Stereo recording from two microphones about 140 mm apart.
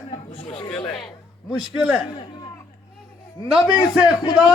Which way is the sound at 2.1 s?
30° left (ahead or behind).